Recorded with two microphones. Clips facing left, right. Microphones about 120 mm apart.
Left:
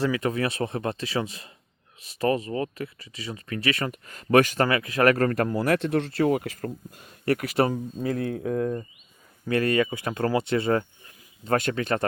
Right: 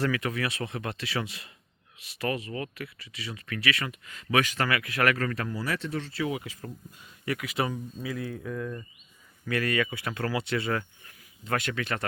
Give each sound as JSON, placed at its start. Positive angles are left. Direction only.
{"t": 0.2, "sound": "speech", "side_deg": 35}
{"t": 7.4, "sound": "speech", "side_deg": 40}
{"t": 9.5, "sound": "speech", "side_deg": 30}
{"t": 10.5, "sound": "a sound", "side_deg": 25}
{"t": 11.5, "sound": "speech", "side_deg": 40}